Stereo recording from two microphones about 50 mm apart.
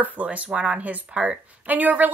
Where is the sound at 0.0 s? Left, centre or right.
Right.